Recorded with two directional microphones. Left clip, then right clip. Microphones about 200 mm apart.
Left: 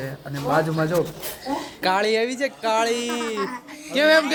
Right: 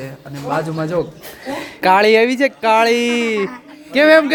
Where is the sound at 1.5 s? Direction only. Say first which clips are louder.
Right 9 dB; 45° right (ahead or behind).